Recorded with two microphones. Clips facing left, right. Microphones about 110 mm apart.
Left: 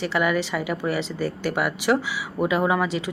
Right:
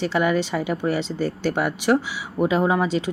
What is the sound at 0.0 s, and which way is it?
Speech, 25° right (ahead or behind).